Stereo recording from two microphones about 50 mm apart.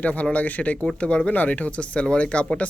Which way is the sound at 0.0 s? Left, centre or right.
Left.